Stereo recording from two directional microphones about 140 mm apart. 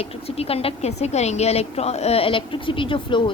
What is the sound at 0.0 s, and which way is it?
Speech, 45° left (ahead or behind).